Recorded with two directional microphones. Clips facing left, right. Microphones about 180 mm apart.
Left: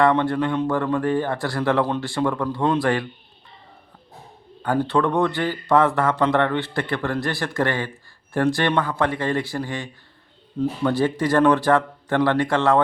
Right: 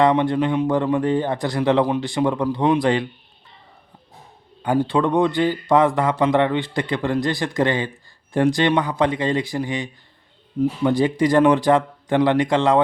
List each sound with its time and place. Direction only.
0.0 s a man's voice: 15° right (ahead or behind)
4.6 s a man's voice: 15° right (ahead or behind)